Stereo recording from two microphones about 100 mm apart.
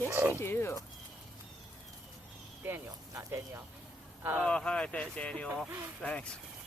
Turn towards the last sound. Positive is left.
turn(degrees=10)  # may be behind; listen again after turning